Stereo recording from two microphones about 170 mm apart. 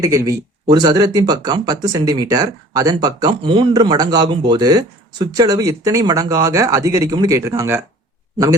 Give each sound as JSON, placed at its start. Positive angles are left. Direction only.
{"t": 0.0, "sound": "speech", "side_deg": -20}